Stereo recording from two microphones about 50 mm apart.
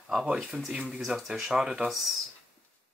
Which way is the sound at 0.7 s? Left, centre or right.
Centre.